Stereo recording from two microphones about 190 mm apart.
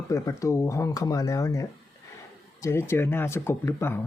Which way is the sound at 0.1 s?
15° left (ahead or behind).